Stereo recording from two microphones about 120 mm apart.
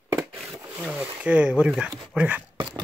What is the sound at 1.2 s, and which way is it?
Speech, 10° right (ahead or behind).